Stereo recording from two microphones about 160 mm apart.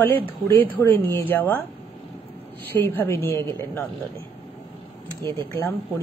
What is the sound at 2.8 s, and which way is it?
A woman's voice, 15° left (ahead or behind).